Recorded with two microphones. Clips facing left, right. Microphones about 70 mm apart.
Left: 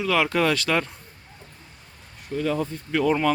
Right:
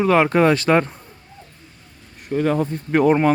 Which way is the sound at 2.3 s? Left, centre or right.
Right.